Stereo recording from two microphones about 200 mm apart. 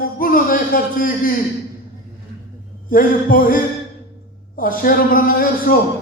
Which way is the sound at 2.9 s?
45° left (ahead or behind).